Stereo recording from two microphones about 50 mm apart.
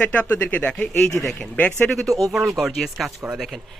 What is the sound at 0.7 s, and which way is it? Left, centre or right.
Speech, centre.